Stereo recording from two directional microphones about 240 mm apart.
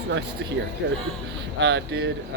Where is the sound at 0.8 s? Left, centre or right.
Right.